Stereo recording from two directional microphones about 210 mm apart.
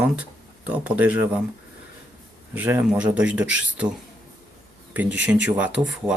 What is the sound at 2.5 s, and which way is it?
Speech, 10° right (ahead or behind).